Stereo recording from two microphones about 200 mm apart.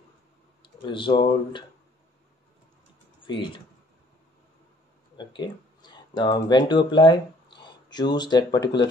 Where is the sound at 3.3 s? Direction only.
25° left (ahead or behind).